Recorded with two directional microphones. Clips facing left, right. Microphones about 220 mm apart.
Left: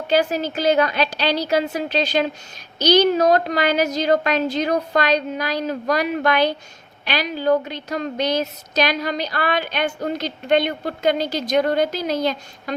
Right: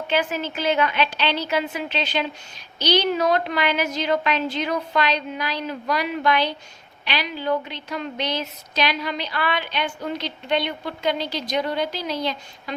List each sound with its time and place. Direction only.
0.1 s a woman's voice: 40° left (ahead or behind)